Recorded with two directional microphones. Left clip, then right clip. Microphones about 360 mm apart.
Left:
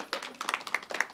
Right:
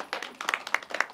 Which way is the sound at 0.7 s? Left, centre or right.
Right.